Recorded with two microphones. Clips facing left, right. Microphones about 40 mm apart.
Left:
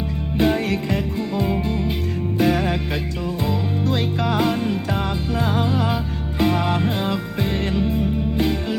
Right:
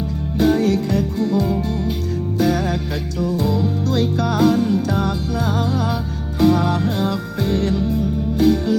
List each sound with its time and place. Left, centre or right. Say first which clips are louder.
0.3 s music: right 3 dB; left